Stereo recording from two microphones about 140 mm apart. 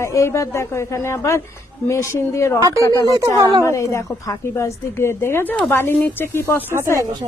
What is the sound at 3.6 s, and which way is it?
Speech, 20° left (ahead or behind).